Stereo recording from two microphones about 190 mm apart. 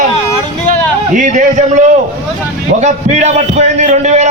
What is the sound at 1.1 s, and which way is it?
Speech, 40° right (ahead or behind).